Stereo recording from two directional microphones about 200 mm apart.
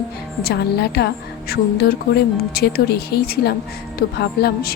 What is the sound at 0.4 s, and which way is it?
Speech, 55° left (ahead or behind).